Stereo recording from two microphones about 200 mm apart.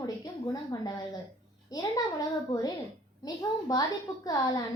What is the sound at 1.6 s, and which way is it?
A child's voice, 20° left (ahead or behind).